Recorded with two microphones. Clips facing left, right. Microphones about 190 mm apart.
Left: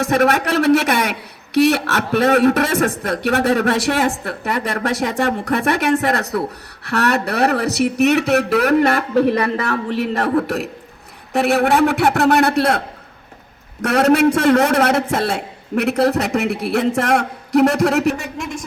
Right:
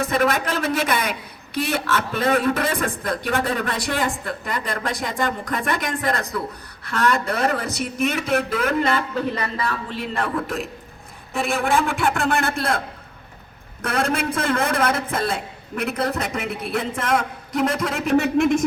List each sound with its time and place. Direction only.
0.0 s a man's voice: 75° left (ahead or behind)
13.8 s a man's voice: 70° left (ahead or behind)
18.2 s a man's voice: 60° right (ahead or behind)